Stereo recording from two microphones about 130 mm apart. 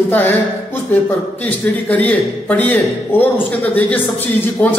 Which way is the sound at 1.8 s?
10° left (ahead or behind).